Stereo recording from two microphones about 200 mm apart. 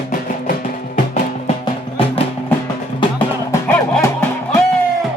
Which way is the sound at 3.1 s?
10° left (ahead or behind).